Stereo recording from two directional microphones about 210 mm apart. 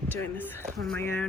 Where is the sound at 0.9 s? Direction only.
10° left (ahead or behind).